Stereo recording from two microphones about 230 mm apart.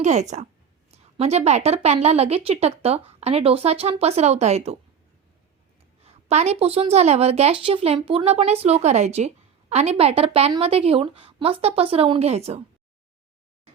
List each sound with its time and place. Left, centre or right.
0.0 s a woman's voice: right
6.0 s a woman's voice: right